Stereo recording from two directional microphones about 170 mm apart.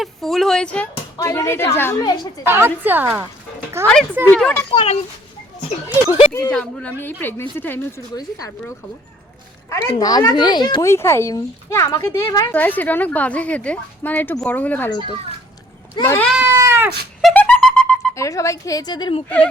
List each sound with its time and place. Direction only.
0.0 s a woman's voice: centre (ahead or behind); by 2.3 s 25° left (ahead or behind)
2.4 s a woman's voice: 15° right (ahead or behind)
4.3 s a woman's voice: 5° left (ahead or behind)
4.7 s speech: 35° left (ahead or behind)
6.5 s speech: 5° left (ahead or behind)
9.6 s a child's voice: 20° left (ahead or behind)
14.8 s a child's voice: 25° left (ahead or behind)
16.0 s speech: 15° left (ahead or behind)
16.2 s goat: 5° right (ahead or behind)
16.6 s cat: 15° right (ahead or behind)
17.2 s music: 5° left (ahead or behind)
18.1 s a child's voice: 20° left (ahead or behind)